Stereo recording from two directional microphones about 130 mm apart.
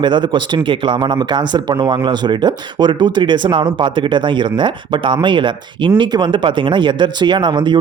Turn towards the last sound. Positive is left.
turn(degrees=-35)  # may be behind; listen again after turning